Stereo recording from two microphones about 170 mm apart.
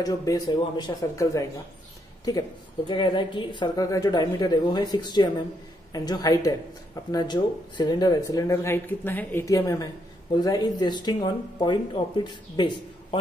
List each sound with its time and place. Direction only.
0.0 s speech: 20° left (ahead or behind)
2.9 s speech: 25° left (ahead or behind)